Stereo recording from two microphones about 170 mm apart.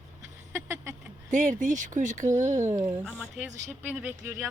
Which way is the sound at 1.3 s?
45° right (ahead or behind).